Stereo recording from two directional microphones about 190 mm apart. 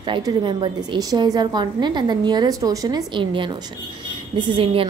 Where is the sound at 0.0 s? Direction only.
25° right (ahead or behind).